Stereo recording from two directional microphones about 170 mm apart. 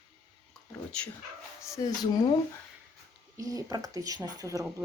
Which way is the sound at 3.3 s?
20° right (ahead or behind).